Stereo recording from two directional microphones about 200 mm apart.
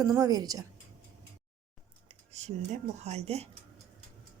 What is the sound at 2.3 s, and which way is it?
Speech, 35° right (ahead or behind).